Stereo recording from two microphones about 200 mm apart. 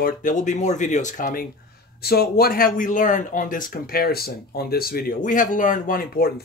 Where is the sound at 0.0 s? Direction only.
40° left (ahead or behind).